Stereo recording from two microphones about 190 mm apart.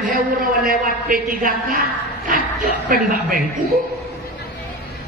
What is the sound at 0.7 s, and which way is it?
A man's voice, 45° right (ahead or behind).